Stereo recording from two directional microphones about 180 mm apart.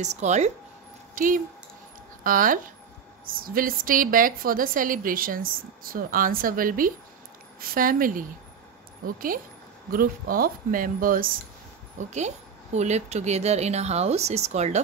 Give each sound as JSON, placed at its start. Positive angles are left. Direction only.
{"t": 0.0, "sound": "a woman's voice", "side_deg": -40}
{"t": 12.0, "sound": "a woman's voice", "side_deg": -40}